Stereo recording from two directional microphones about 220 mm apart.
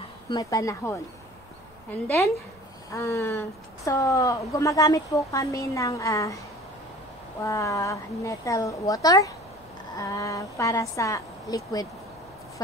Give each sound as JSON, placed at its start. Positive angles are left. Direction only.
{"t": 0.3, "sound": "speech", "side_deg": 15}
{"t": 2.0, "sound": "speech", "side_deg": 10}
{"t": 7.4, "sound": "speech", "side_deg": 15}